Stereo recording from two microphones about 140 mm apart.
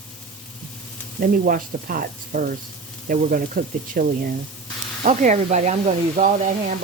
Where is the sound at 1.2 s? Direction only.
90° right.